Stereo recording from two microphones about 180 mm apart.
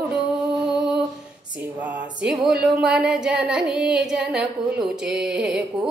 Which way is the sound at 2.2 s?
Centre (ahead or behind).